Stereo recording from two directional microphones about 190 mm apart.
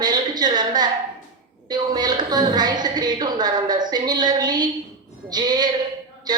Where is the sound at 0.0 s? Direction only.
20° right (ahead or behind).